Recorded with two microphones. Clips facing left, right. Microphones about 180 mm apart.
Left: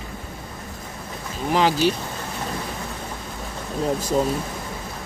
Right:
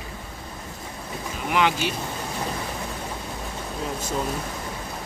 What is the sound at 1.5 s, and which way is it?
Speech, 35° left (ahead or behind).